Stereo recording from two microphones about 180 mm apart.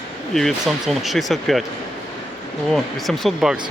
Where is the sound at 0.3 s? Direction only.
Centre (ahead or behind).